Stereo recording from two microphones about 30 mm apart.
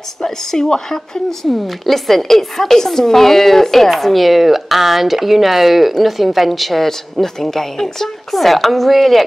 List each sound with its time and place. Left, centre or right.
0.2 s a woman's voice: centre
1.4 s a woman's voice: centre
3.9 s speech: centre
6.9 s speech: centre